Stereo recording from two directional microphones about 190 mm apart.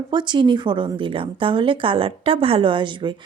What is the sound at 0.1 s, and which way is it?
A woman's voice, 25° right (ahead or behind).